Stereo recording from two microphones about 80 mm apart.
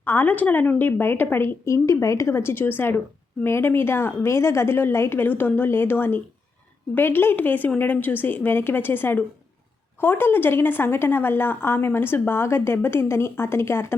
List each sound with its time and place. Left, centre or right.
0.0 s a woman's voice: left
1.6 s a woman's voice: left